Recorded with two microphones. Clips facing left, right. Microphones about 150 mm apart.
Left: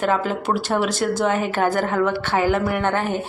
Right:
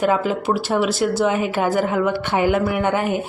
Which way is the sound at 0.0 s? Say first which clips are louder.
Right 2 dB; 5° right (ahead or behind).